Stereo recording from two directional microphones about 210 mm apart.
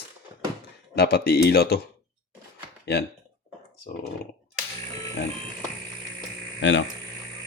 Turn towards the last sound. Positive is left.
turn(degrees=60)  # may be behind; listen again after turning